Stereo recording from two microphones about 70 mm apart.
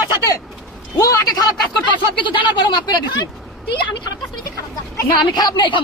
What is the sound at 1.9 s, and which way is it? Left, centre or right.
Speech, left.